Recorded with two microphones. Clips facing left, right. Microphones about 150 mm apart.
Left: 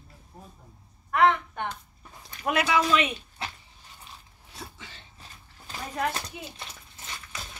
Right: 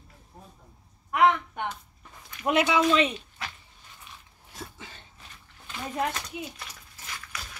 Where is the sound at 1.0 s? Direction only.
15° right (ahead or behind).